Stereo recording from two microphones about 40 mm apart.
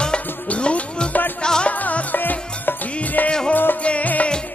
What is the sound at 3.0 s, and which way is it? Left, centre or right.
Music of bollywood, left.